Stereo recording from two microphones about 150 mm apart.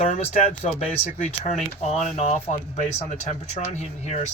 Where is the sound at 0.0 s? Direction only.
45° left (ahead or behind).